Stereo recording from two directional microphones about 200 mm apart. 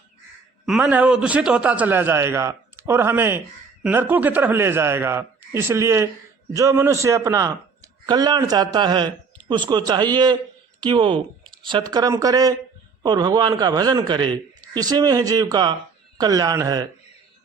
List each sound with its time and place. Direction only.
0.6 s a man's voice: 5° right (ahead or behind)